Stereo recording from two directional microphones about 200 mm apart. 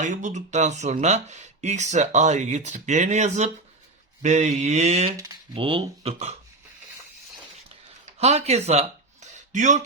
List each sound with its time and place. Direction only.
0.0 s speech: 40° right (ahead or behind)
5.1 s speech: 20° right (ahead or behind)
8.2 s speech: 30° right (ahead or behind)